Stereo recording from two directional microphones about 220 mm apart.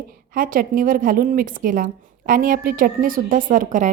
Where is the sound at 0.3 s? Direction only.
40° right (ahead or behind).